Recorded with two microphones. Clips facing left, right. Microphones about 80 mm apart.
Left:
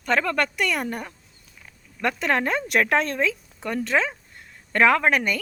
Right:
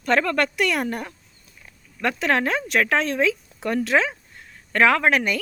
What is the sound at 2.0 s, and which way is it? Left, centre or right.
Speech, centre.